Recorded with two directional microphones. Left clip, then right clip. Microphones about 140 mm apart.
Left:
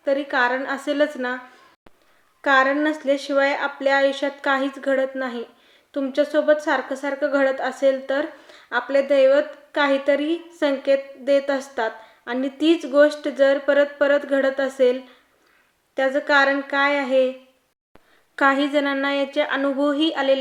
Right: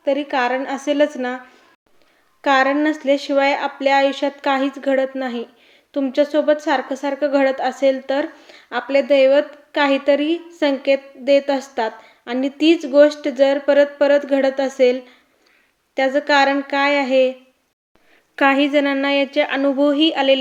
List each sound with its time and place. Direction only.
0.0 s speech: 25° right (ahead or behind)
2.4 s speech: 20° right (ahead or behind)
18.3 s speech: 20° right (ahead or behind)